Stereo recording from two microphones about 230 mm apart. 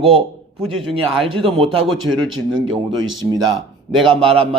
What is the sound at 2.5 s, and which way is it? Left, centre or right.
Speech, right.